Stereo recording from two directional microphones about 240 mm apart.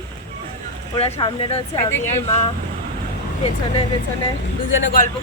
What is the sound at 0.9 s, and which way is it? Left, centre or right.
Speech, left.